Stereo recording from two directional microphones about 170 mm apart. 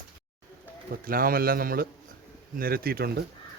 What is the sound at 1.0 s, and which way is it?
A man's voice, 60° right (ahead or behind).